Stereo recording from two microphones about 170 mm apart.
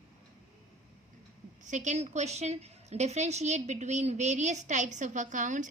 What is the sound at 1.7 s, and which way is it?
A woman's voice, 45° right (ahead or behind).